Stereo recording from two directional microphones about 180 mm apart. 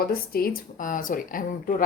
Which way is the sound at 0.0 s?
55° left (ahead or behind).